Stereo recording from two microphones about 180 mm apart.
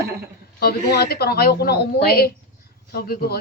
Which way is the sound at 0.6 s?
60° left (ahead or behind).